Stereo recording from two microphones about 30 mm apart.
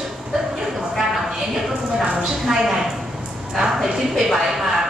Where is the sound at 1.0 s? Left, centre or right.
Centre.